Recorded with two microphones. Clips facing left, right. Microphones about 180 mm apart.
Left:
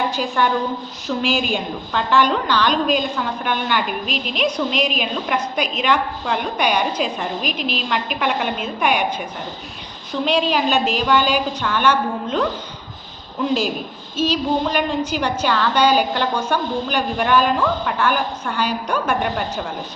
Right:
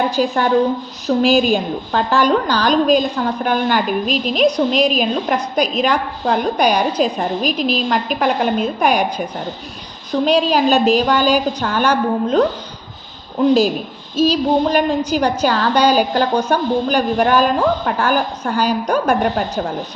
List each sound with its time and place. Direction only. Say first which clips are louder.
0.2 s a woman's voice: right 7 dB; 40° right (ahead or behind)
14.2 s a woman's voice: right 5 dB; 40° right (ahead or behind)